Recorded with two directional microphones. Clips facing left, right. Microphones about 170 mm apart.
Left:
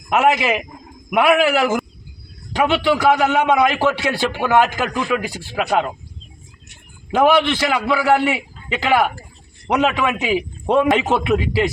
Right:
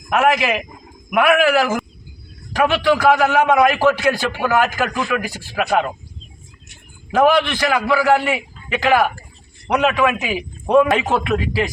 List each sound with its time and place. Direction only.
0.1 s a man's voice: 25° left (ahead or behind)
7.1 s a man's voice: 25° left (ahead or behind)